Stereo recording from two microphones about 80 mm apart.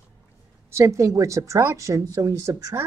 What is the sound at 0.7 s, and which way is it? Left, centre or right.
A woman's voice, right.